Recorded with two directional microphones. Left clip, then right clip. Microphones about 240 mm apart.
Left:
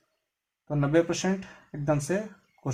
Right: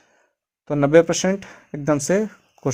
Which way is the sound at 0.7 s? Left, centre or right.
Right.